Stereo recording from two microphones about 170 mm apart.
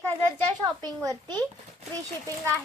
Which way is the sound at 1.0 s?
20° right (ahead or behind).